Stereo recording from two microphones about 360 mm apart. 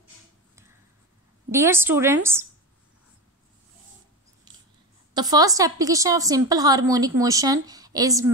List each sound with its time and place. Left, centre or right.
1.5 s a woman's voice: centre
4.5 s a sound: centre
5.1 s a woman's voice: centre